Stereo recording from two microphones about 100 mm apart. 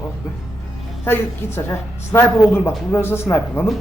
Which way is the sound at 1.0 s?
25° left (ahead or behind).